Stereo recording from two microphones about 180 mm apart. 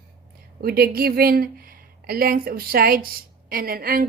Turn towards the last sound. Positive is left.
turn(degrees=-55)  # may be behind; listen again after turning